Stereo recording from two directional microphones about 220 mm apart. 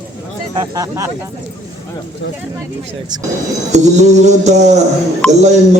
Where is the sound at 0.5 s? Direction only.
15° right (ahead or behind).